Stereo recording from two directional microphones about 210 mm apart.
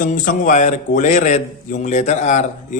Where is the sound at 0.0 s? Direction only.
40° left (ahead or behind).